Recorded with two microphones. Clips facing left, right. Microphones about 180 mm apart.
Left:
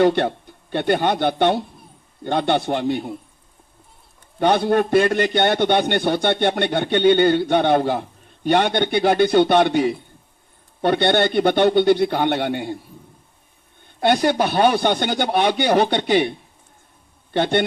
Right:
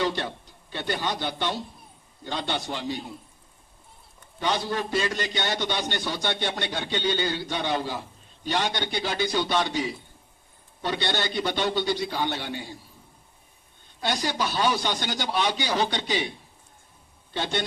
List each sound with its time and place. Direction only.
0.0 s a man's voice: 60° left (ahead or behind)
4.4 s a man's voice: 60° left (ahead or behind)
13.8 s a man's voice: 60° left (ahead or behind)
17.3 s a man's voice: 60° left (ahead or behind)